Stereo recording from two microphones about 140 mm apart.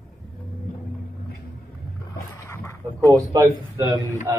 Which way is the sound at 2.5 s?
20° left (ahead or behind).